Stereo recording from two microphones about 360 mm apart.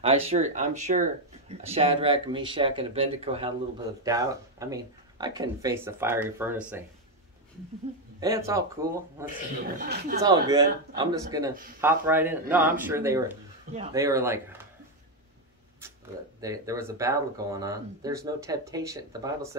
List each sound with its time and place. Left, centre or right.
0.0 s speech: centre
8.2 s speech: centre
9.8 s speech: right
10.2 s speech: centre
16.3 s speech: centre